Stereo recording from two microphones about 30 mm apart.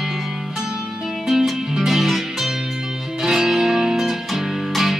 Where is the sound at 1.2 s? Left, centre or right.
Centre.